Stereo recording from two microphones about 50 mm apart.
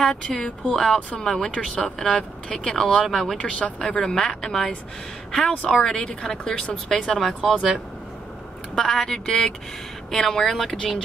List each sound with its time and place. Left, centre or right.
0.2 s speech: centre
3.3 s speech: left
7.2 s speech: centre
7.5 s speech: centre
8.7 s speech: centre